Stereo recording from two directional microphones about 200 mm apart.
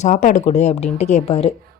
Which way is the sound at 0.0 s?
40° left (ahead or behind).